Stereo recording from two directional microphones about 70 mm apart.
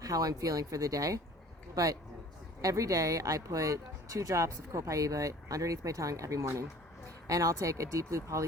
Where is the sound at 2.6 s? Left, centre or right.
Right.